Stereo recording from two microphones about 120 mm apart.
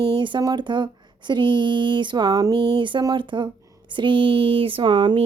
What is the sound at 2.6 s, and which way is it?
Speech, 45° right (ahead or behind).